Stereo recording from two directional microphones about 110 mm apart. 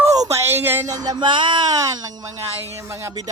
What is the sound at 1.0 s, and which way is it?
Speech, 45° right (ahead or behind).